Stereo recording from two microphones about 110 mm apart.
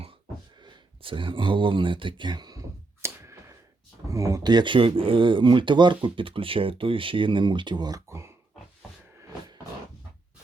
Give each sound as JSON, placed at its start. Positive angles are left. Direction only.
{"t": 0.6, "sound": "speech", "side_deg": -45}
{"t": 3.0, "sound": "a sound", "side_deg": -25}
{"t": 4.1, "sound": "speech", "side_deg": -30}